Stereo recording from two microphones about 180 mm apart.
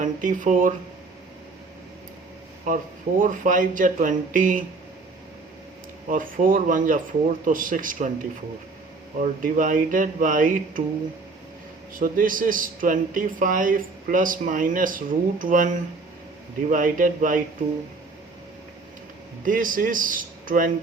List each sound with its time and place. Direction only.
0.0 s speech: 45° right (ahead or behind)
2.6 s a man's voice: 50° right (ahead or behind)
6.1 s a man's voice: 50° right (ahead or behind)
11.9 s a man's voice: 50° right (ahead or behind)
19.5 s a man's voice: 50° right (ahead or behind)